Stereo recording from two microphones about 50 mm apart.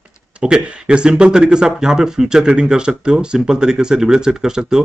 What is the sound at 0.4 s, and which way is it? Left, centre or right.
Speech, centre.